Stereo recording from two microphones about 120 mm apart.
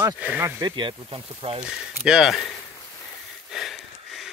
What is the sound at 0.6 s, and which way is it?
Speech, 40° right (ahead or behind).